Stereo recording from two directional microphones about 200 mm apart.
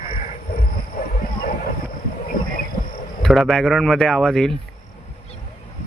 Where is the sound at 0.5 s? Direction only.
50° left (ahead or behind).